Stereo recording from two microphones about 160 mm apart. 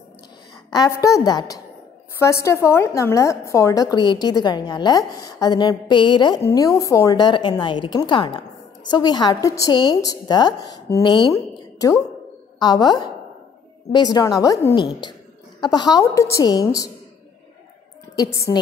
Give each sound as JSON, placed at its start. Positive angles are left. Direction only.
{"t": 0.7, "sound": "a woman's voice", "side_deg": 25}
{"t": 12.5, "sound": "a woman's voice", "side_deg": 25}
{"t": 18.1, "sound": "a woman's voice", "side_deg": 20}